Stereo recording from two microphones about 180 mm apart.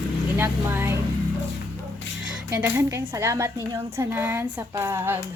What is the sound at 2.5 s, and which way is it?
Speech, 15° right (ahead or behind).